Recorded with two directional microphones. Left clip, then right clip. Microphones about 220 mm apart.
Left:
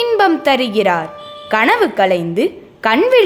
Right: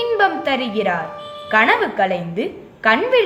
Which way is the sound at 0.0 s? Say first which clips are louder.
Left 4 dB; 50° left (ahead or behind).